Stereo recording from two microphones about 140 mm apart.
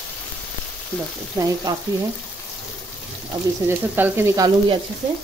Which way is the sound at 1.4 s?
30° right (ahead or behind).